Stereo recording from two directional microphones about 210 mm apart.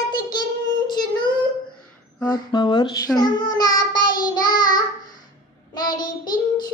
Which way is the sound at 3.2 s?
20° left (ahead or behind).